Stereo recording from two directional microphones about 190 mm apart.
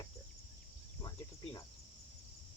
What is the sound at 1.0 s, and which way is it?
Cricket, 20° left (ahead or behind).